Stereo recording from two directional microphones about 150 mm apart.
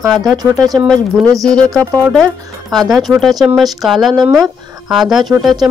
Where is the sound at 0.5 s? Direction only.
25° right (ahead or behind).